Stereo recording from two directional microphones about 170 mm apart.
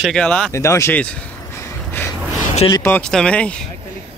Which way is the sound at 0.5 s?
15° left (ahead or behind).